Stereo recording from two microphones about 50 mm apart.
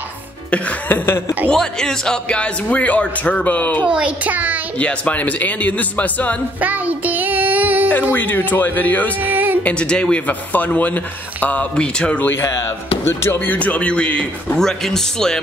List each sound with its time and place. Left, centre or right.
0.8 s speech: left
1.5 s speech: centre; by 3.8 s left
3.8 s a child's voice: centre
4.2 s a child's voice: right
4.7 s speech: left
6.6 s child singing: right
8.1 s speech: left
9.3 s music: right
9.8 s a man's voice: centre
10.2 s speech: left
11.7 s a man's voice: left
13.0 s music: left
13.4 s a man's voice: left
14.6 s speech: centre